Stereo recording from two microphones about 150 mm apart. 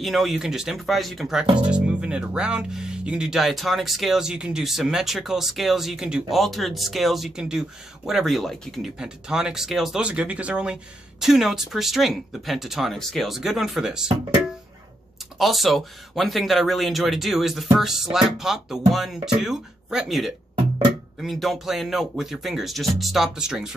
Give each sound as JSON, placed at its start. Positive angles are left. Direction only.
{"t": 0.0, "sound": "speech", "side_deg": 0}
{"t": 15.3, "sound": "speech", "side_deg": 0}